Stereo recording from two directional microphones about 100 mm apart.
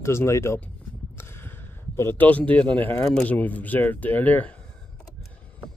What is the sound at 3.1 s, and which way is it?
Speech, 15° left (ahead or behind).